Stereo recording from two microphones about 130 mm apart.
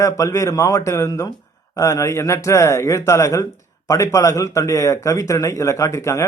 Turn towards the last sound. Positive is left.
turn(degrees=20)  # may be behind; listen again after turning